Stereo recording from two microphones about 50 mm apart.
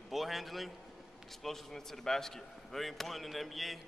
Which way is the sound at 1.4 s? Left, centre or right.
Centre.